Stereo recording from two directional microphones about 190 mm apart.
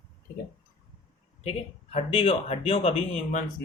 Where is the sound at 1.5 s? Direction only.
30° left (ahead or behind).